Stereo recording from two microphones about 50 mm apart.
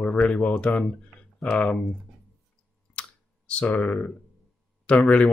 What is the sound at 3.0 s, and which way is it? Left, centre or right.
Clicking, left.